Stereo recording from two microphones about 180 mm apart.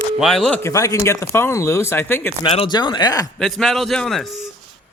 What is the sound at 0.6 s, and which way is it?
Speech, 15° left (ahead or behind).